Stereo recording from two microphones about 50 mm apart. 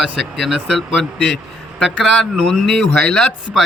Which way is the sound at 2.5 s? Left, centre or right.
Centre.